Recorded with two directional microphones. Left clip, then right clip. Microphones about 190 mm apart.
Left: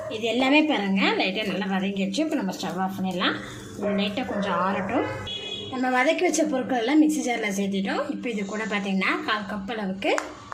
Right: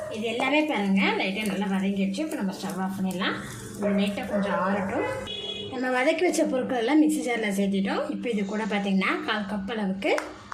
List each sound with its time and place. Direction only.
0.2 s a woman's voice: 35° left (ahead or behind)
5.8 s a woman's voice: centre (ahead or behind)